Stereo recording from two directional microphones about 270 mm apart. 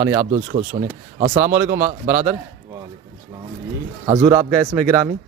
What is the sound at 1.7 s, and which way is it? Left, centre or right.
Speech, centre.